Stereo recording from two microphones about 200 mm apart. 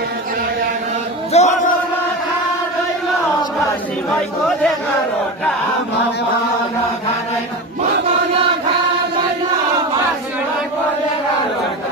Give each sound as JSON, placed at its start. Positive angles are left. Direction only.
{"t": 1.3, "sound": "chant", "side_deg": 35}